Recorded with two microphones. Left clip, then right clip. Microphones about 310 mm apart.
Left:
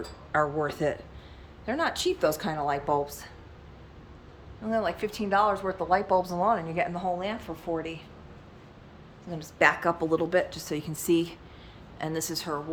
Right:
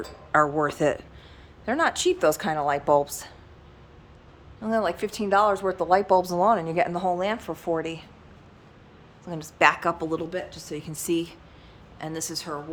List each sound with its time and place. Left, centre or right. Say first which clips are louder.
0.3 s a woman's voice: right 5 dB; centre
4.6 s speech: right 3 dB; centre
9.2 s a woman's voice: right 3 dB; centre